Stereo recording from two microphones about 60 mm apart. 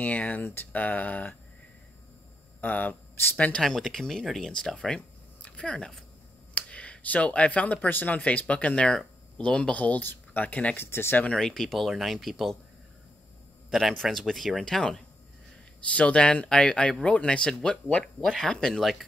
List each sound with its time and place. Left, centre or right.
0.0 s speech: left
0.4 s speech: left
0.7 s speech: left
2.6 s speech: left
3.6 s speech: centre; by 10.8 s left
10.8 s speech: left
11.2 s speech: centre
13.7 s speech: centre
14.6 s speech: centre
18.2 s speech: centre